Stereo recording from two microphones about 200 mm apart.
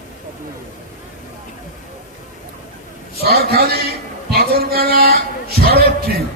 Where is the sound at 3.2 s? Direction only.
50° right (ahead or behind).